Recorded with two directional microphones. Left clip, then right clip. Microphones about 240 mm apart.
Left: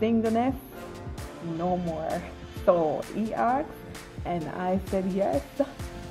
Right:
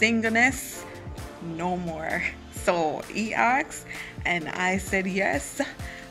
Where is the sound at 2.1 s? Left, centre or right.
Centre.